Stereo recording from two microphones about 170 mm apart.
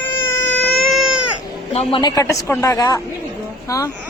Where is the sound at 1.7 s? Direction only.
30° left (ahead or behind).